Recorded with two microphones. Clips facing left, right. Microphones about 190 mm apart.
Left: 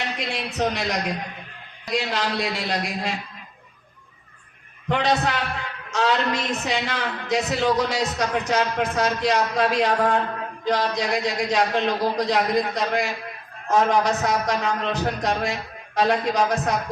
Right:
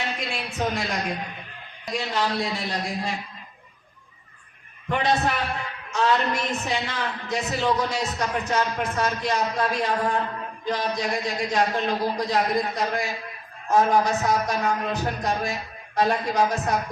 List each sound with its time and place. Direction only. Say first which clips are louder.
0.3 s a man's voice: left 5 dB; 70° left (ahead or behind)
4.9 s a man's voice: left 1 dB; 90° left